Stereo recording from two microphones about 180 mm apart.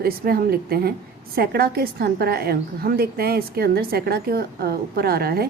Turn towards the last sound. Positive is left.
turn(degrees=-60)  # may be behind; listen again after turning